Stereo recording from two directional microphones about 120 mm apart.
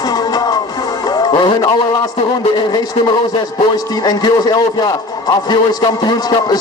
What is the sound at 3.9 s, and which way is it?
A man's voice, 35° left (ahead or behind).